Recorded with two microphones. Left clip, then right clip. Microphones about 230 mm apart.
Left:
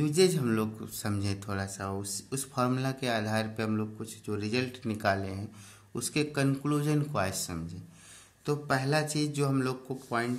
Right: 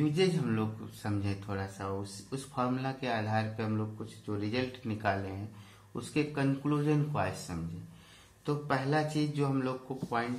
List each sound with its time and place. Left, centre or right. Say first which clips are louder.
0.0 s speech: left 4 dB; left